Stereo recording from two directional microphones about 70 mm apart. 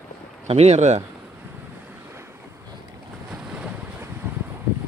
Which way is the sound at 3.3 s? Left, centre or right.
Centre.